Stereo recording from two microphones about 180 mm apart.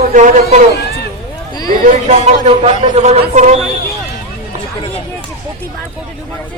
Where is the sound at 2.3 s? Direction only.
35° right (ahead or behind).